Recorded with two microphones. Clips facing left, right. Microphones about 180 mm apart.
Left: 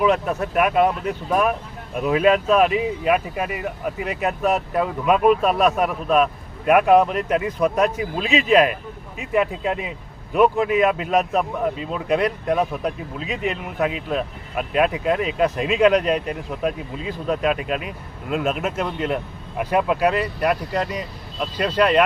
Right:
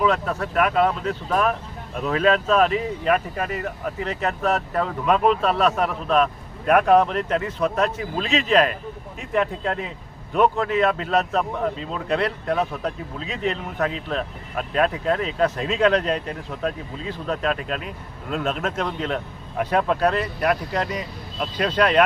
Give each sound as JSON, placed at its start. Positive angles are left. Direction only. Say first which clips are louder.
{"t": 0.0, "sound": "speech", "louder": "left 2 dB", "side_deg": 15}